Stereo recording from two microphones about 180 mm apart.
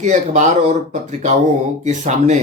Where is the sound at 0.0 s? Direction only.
40° right (ahead or behind).